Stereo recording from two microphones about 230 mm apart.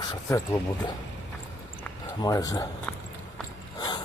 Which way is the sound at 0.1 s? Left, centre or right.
Centre.